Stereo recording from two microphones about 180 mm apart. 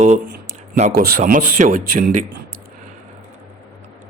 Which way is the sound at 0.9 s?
55° right (ahead or behind).